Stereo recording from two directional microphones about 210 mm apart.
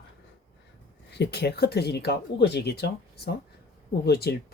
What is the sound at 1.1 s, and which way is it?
Speech, 50° left (ahead or behind).